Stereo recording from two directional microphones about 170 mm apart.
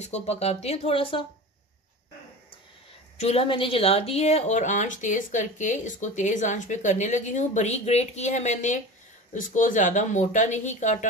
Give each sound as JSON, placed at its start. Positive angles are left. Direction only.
{"t": 0.0, "sound": "speech", "side_deg": 40}
{"t": 3.2, "sound": "a woman's voice", "side_deg": 35}